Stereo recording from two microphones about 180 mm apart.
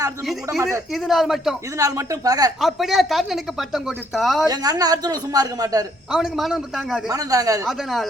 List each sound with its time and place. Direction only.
0.9 s speech: centre (ahead or behind)
1.8 s a man's voice: 20° right (ahead or behind)
2.6 s speech: centre (ahead or behind)
4.4 s a man's voice: 20° right (ahead or behind)
6.1 s speech: centre (ahead or behind)
7.1 s a man's voice: 20° right (ahead or behind)
7.7 s speech: centre (ahead or behind)